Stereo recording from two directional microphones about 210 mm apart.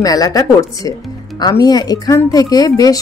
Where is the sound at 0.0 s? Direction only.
15° left (ahead or behind).